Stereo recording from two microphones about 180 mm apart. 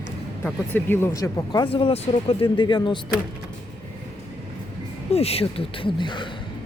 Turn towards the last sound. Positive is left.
turn(degrees=25)  # may be behind; listen again after turning